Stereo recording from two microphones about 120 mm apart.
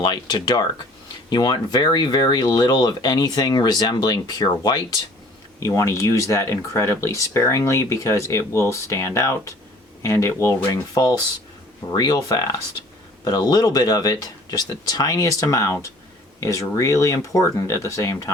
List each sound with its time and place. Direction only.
0.0 s speech: 40° left (ahead or behind)
5.6 s speech: 25° left (ahead or behind)